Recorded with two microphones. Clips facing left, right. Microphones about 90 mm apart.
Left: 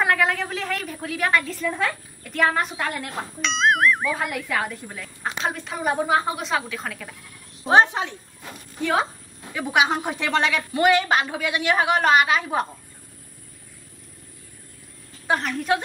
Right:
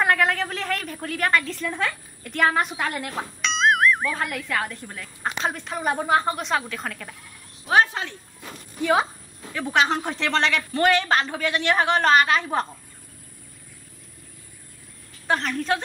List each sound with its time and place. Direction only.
0.0 s a woman's voice: centre (ahead or behind)
7.6 s speech: 25° left (ahead or behind)
9.5 s a woman's voice: 10° left (ahead or behind)
15.2 s a woman's voice: 10° left (ahead or behind)